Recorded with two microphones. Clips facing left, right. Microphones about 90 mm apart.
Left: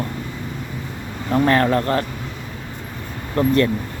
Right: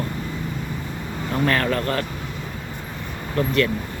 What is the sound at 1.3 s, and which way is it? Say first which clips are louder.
Speech: left 5 dB; 20° left (ahead or behind).